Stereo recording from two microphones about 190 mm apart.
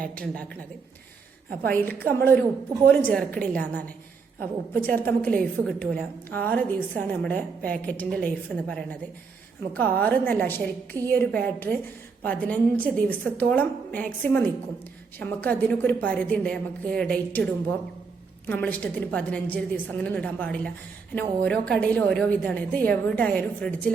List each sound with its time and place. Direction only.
0.0 s a woman's voice: 5° left (ahead or behind)
1.6 s a woman's voice: 10° left (ahead or behind)
10.9 s a woman's voice: 20° right (ahead or behind)
11.4 s a woman's voice: 10° left (ahead or behind)